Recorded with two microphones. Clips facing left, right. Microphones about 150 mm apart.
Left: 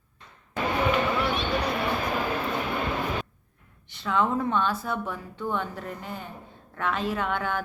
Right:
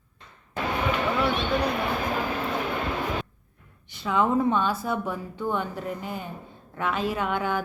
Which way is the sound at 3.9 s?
5° right (ahead or behind).